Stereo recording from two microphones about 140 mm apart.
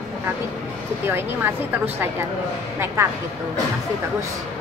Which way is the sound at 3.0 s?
20° right (ahead or behind).